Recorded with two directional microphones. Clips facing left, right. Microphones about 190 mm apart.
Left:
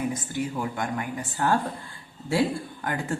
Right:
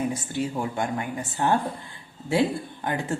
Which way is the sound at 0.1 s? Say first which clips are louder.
Right 1 dB; 30° right (ahead or behind).